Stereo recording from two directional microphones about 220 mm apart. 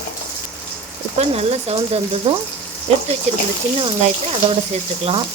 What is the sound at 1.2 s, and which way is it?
Speech, 30° right (ahead or behind).